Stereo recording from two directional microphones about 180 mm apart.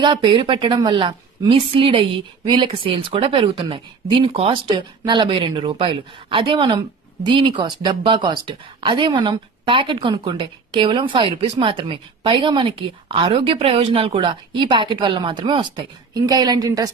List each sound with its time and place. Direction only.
0.0 s speech: 25° right (ahead or behind)